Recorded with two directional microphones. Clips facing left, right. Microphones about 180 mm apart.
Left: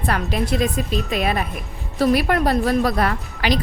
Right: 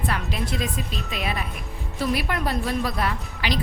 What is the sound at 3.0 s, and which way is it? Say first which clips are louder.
Speech: left 5 dB; 45° left (ahead or behind).